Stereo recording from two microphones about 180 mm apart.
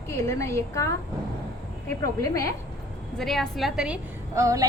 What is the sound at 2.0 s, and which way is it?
Speech, 20° left (ahead or behind).